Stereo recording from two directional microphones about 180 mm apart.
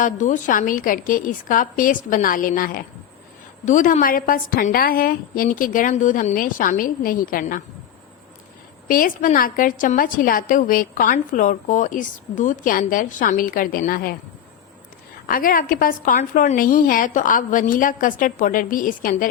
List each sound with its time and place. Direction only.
0.0 s a woman's voice: 45° left (ahead or behind)
8.9 s a woman's voice: 50° left (ahead or behind)
15.3 s a woman's voice: 50° left (ahead or behind)